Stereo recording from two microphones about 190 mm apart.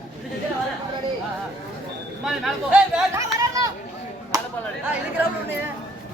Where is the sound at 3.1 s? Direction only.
20° right (ahead or behind).